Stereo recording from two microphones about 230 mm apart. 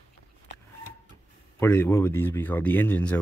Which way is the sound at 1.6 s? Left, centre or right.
Centre.